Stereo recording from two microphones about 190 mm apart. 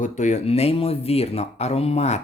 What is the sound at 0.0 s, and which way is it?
Speech, 40° left (ahead or behind).